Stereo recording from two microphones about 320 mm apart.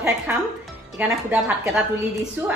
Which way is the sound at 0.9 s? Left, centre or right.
Centre.